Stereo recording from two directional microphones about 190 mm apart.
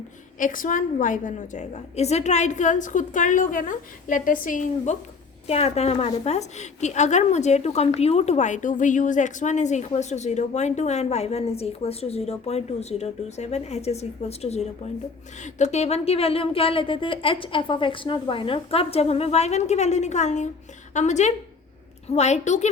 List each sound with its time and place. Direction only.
0.3 s a woman's voice: 45° left (ahead or behind)